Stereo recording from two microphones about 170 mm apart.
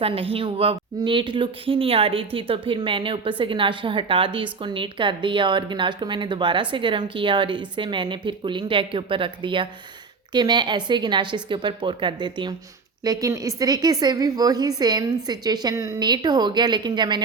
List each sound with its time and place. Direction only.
0.0 s speech: 35° right (ahead or behind)